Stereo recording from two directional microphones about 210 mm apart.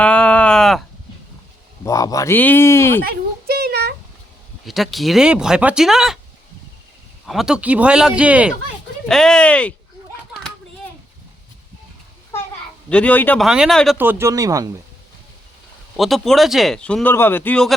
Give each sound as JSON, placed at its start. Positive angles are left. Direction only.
{"t": 0.0, "sound": "a sound", "side_deg": 5}
{"t": 1.8, "sound": "speech", "side_deg": 15}
{"t": 3.0, "sound": "a sound", "side_deg": -45}
{"t": 4.6, "sound": "speech", "side_deg": 0}
{"t": 7.3, "sound": "speech", "side_deg": 0}
{"t": 12.9, "sound": "speech", "side_deg": 5}
{"t": 14.0, "sound": "speech", "side_deg": -10}
{"t": 16.0, "sound": "speech", "side_deg": 0}